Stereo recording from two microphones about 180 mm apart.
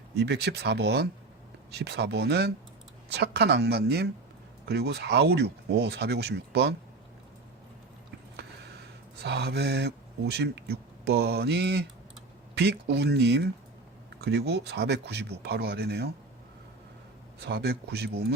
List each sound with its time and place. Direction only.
0.2 s a woman's voice: 65° right (ahead or behind)
8.4 s speech: 65° right (ahead or behind)
17.4 s a woman's voice: 65° right (ahead or behind)